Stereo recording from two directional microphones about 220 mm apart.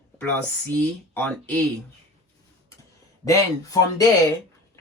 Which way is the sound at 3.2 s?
15° left (ahead or behind).